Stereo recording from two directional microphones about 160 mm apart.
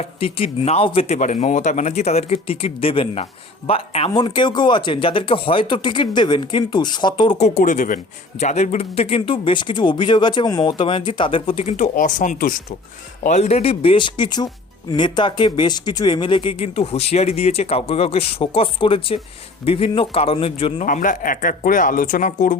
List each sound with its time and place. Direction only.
0.0 s a man's voice: 35° left (ahead or behind)
7.3 s a man's voice: 45° left (ahead or behind)
20.8 s speech: 55° left (ahead or behind)